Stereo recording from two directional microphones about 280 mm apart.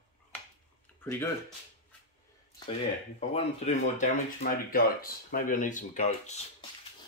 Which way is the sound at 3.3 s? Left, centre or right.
Left.